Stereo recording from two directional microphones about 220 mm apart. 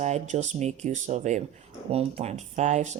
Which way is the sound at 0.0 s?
30° right (ahead or behind).